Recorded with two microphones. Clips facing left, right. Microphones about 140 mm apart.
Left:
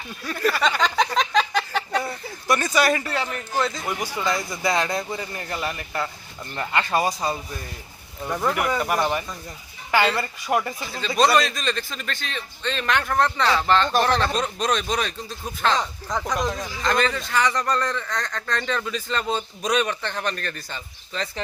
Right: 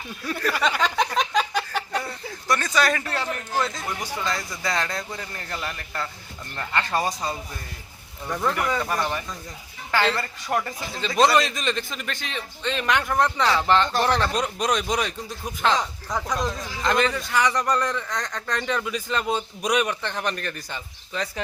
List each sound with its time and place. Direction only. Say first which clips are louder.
0.5 s a sound: right 1 dB; 10° right (ahead or behind)
2.0 s speech: left 2 dB; 10° left (ahead or behind)
3.8 s speech: left 3 dB; 15° left (ahead or behind)
11.3 s speech: even; 20° right (ahead or behind)